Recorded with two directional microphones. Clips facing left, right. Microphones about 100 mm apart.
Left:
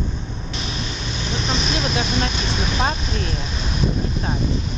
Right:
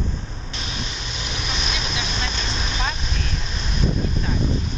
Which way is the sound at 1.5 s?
40° left (ahead or behind).